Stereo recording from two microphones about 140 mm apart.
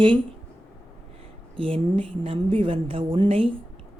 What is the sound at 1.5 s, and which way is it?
A woman's voice, 40° right (ahead or behind).